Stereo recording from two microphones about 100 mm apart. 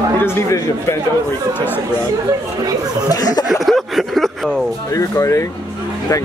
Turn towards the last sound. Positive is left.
turn(degrees=30)  # may be behind; listen again after turning